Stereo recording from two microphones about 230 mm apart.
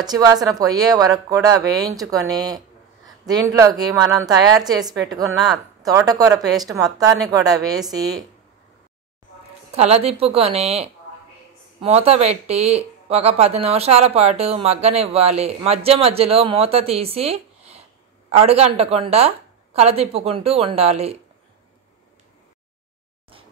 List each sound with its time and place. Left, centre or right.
0.0 s speech: centre
9.7 s speech: right